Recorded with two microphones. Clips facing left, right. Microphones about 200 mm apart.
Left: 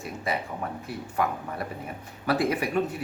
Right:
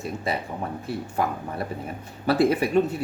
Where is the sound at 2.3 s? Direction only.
30° right (ahead or behind).